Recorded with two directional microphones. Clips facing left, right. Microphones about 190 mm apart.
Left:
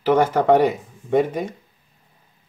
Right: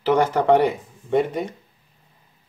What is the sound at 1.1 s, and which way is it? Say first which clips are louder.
Speech: left 1 dB; 50° left (ahead or behind).